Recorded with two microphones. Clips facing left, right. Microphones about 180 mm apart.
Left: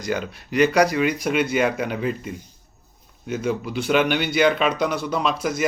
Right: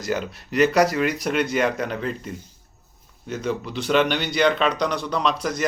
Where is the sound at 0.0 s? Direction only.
Centre (ahead or behind).